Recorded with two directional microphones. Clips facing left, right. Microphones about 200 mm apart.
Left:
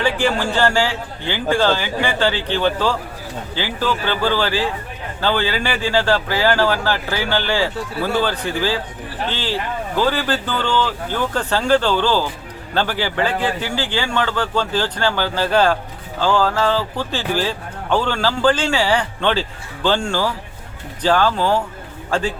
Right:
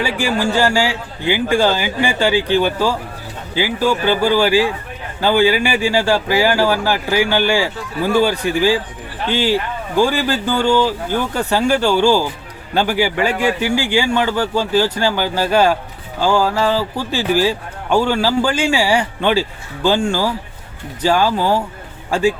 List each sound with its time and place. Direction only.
0.0 s a man's voice: 10° right (ahead or behind)